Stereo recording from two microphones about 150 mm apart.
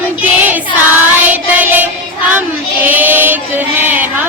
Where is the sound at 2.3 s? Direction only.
10° right (ahead or behind).